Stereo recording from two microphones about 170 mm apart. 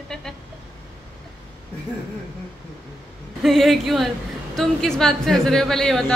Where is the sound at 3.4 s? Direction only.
Centre (ahead or behind).